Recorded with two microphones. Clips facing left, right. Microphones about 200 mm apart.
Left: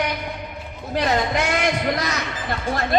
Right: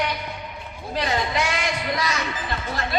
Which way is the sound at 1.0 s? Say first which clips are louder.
Left 3 dB; 50° left (ahead or behind).